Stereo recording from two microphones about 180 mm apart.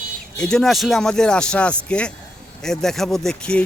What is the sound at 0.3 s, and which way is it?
Speech, 5° left (ahead or behind).